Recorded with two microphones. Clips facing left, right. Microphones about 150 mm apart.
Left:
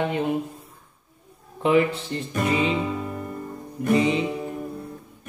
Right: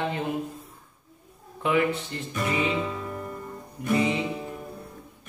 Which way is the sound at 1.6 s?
25° left (ahead or behind).